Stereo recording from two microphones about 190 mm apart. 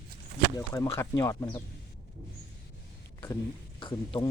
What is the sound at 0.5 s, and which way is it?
Speech, 15° left (ahead or behind).